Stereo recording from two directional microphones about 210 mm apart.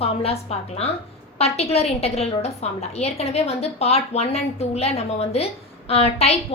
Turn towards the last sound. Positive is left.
turn(degrees=30)  # may be behind; listen again after turning